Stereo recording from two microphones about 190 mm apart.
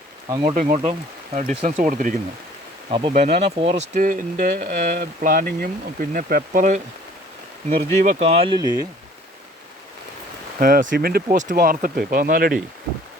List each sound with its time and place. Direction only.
0.3 s speech: 20° right (ahead or behind)
0.5 s speech: 45° right (ahead or behind)
2.9 s speech: 30° right (ahead or behind)
7.9 s speech: 35° right (ahead or behind); by 8.9 s 20° right (ahead or behind)
10.6 s speech: 45° right (ahead or behind)